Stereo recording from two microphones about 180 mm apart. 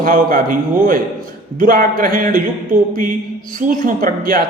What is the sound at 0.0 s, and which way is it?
A man's voice, 50° right (ahead or behind).